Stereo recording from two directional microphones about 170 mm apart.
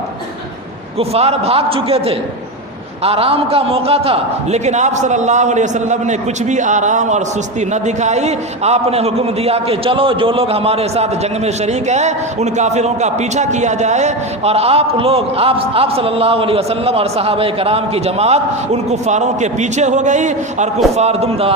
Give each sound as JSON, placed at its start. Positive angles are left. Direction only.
{"t": 0.9, "sound": "a man's voice", "side_deg": -35}